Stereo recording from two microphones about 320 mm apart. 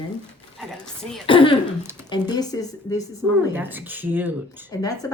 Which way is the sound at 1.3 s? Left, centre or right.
Centre.